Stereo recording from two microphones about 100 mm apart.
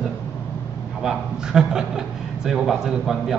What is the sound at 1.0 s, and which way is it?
A man's voice, 5° right (ahead or behind).